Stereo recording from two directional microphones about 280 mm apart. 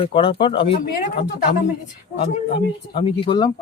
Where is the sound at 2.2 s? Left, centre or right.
Centre.